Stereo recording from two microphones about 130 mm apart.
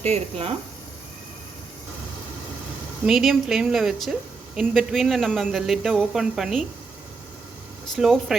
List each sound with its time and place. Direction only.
0.0 s speech: 50° right (ahead or behind)
3.1 s speech: centre (ahead or behind)
7.9 s speech: 5° right (ahead or behind)